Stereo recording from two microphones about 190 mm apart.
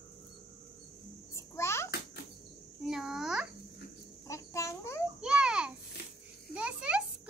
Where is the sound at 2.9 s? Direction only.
Centre (ahead or behind).